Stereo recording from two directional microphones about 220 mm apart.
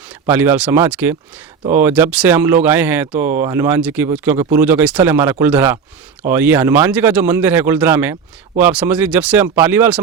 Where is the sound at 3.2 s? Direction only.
35° right (ahead or behind).